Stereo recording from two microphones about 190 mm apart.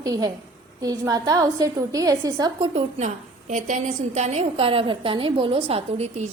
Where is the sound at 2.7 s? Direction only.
40° right (ahead or behind).